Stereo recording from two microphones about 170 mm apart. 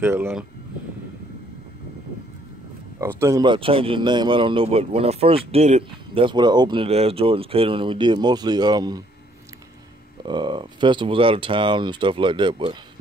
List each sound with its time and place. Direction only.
0.0 s speech: 15° right (ahead or behind)
3.0 s speech: 15° right (ahead or behind)
10.2 s speech: 25° right (ahead or behind)